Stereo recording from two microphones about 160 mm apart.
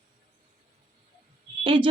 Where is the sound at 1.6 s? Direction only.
30° right (ahead or behind).